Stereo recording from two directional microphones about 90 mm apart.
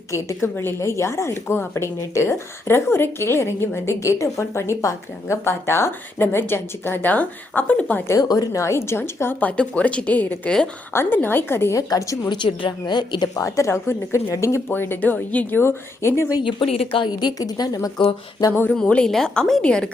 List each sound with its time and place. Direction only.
0.1 s speech: 30° left (ahead or behind); by 8.0 s 15° left (ahead or behind)
8.0 s speech: 40° left (ahead or behind); by 11.8 s 25° left (ahead or behind)
11.8 s a woman's voice: 40° left (ahead or behind)
12.3 s a woman's voice: 65° left (ahead or behind); by 16.4 s 30° left (ahead or behind)
16.4 s speech: 70° left (ahead or behind); by 17.1 s 85° left
17.1 s a woman's voice: 50° left (ahead or behind)
18.0 s speech: 65° left (ahead or behind)
18.7 s a woman's voice: 10° left (ahead or behind)